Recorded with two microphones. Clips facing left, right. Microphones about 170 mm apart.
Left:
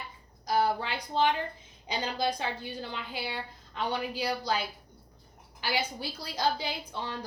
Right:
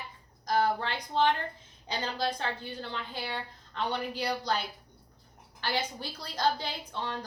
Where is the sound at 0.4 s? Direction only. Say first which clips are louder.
Even; 10° left (ahead or behind).